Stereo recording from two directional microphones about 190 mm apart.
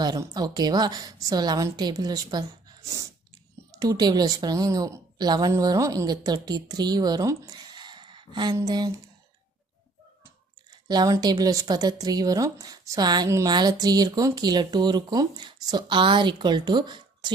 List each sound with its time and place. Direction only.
0.0 s a woman's voice: 20° right (ahead or behind)
2.8 s sneeze: 15° right (ahead or behind)
3.7 s a woman's voice: 20° right (ahead or behind)
10.8 s a woman's voice: 20° right (ahead or behind)